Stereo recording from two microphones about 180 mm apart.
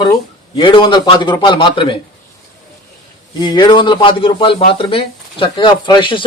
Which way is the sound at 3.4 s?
25° left (ahead or behind).